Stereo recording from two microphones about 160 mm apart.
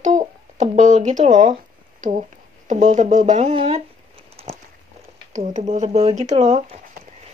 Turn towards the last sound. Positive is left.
turn(degrees=-40)  # may be behind; listen again after turning